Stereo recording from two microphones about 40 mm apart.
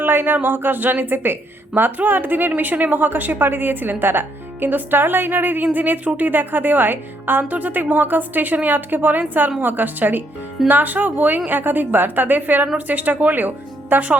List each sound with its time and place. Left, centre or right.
0.0 s a sound: right
0.3 s a woman's voice: right
7.4 s a woman's voice: right
13.9 s a woman's voice: right